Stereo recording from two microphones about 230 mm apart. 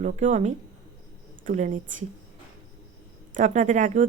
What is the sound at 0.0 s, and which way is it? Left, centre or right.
A woman's voice, right.